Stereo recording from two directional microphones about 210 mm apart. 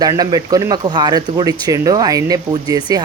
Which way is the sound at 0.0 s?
20° right (ahead or behind).